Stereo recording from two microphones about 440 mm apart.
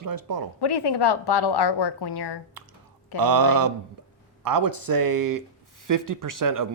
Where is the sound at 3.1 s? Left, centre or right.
Right.